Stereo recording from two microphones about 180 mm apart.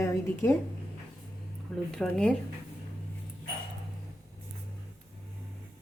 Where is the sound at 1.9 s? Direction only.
5° left (ahead or behind).